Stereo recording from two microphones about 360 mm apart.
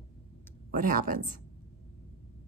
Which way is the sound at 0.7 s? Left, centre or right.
Right.